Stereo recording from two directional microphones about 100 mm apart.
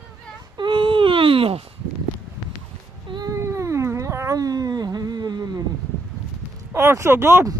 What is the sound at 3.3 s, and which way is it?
Cat, 30° right (ahead or behind).